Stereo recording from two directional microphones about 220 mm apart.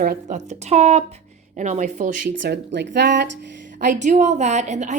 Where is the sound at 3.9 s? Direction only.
35° right (ahead or behind).